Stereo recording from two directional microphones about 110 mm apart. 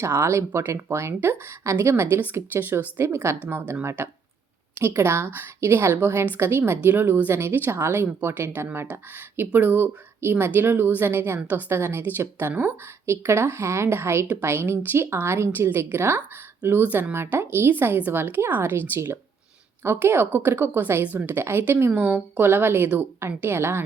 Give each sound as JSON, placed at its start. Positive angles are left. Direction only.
{"t": 0.0, "sound": "a woman's voice", "side_deg": -25}